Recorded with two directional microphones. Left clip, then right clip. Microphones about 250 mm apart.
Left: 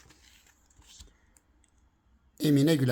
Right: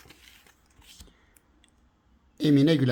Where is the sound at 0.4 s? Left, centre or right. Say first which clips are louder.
Right 4 dB; centre.